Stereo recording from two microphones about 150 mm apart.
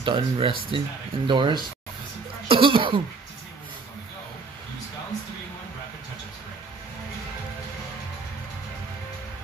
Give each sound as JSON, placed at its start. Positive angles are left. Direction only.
{"t": 0.0, "sound": "speech", "side_deg": -35}
{"t": 2.4, "sound": "cough", "side_deg": -35}